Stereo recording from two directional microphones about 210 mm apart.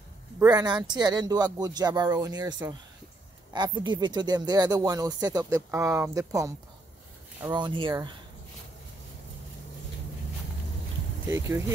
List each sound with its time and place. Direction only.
0.4 s speech: 20° right (ahead or behind)
11.2 s speech: 10° right (ahead or behind)